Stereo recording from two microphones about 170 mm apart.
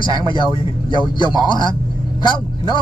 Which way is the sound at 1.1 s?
25° left (ahead or behind).